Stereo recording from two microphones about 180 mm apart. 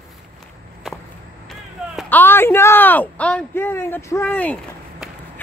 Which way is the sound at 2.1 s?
10° left (ahead or behind).